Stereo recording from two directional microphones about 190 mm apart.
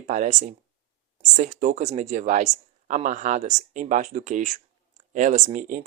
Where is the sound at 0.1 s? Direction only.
40° right (ahead or behind).